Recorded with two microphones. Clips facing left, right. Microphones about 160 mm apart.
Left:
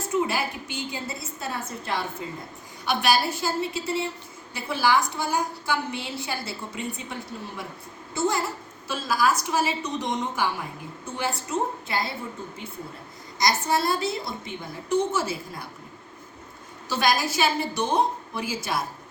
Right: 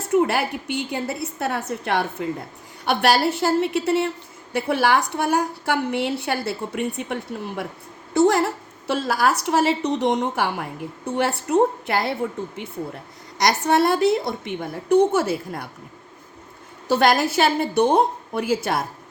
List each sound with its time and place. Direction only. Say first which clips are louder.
0.1 s a woman's voice: right 7 dB; 65° right (ahead or behind)
13.4 s a woman's voice: right 6 dB; 65° right (ahead or behind)
16.9 s a woman's voice: right 6 dB; 60° right (ahead or behind)